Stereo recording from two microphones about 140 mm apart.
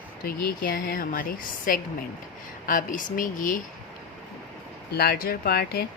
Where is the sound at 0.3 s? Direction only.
90° left.